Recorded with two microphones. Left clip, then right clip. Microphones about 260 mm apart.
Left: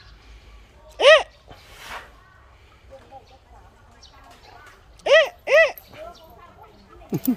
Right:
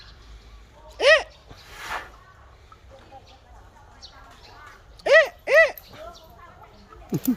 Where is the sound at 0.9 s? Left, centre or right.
Centre.